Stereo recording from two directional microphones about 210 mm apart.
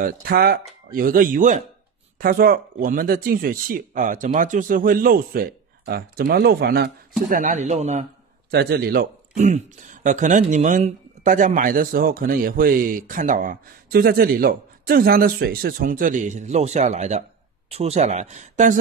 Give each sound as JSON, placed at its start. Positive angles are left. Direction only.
{"t": 0.0, "sound": "speech", "side_deg": -45}
{"t": 8.5, "sound": "speech", "side_deg": -50}